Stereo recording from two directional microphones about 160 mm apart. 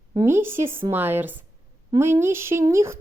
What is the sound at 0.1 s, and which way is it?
A woman's voice, 20° right (ahead or behind).